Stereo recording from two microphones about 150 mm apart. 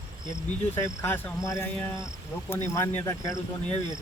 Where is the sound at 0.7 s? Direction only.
15° left (ahead or behind).